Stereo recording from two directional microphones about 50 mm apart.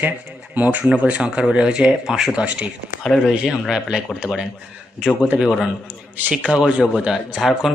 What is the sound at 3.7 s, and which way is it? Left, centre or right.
Speech, centre.